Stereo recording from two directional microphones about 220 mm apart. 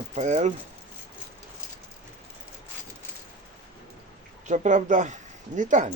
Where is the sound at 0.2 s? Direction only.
30° right (ahead or behind).